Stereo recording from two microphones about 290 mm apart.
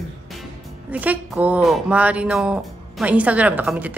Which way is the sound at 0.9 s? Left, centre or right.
Centre.